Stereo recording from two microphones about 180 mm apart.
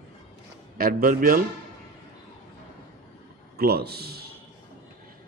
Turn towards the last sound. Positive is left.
turn(degrees=-60)  # may be behind; listen again after turning